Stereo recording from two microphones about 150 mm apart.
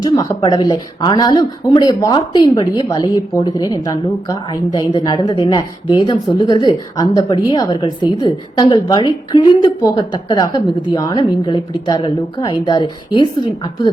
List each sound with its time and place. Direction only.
0.0 s a woman's voice: 25° left (ahead or behind)